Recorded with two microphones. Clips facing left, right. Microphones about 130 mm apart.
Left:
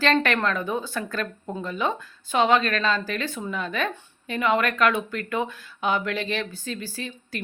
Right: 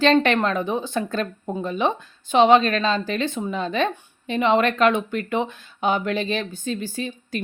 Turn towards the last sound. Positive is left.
turn(degrees=-20)  # may be behind; listen again after turning